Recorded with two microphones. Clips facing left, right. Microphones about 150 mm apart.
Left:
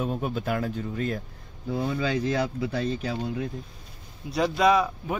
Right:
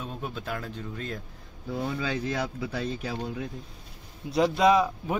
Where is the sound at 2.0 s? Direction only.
25° left (ahead or behind).